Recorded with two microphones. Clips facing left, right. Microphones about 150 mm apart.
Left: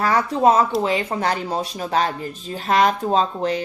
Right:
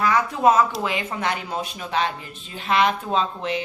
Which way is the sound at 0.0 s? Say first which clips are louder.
Left 2 dB; 35° left (ahead or behind).